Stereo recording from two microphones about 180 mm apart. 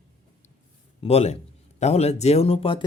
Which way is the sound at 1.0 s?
35° left (ahead or behind).